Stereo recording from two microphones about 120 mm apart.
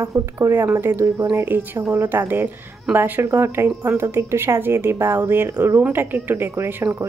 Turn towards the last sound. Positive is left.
turn(degrees=-20)  # may be behind; listen again after turning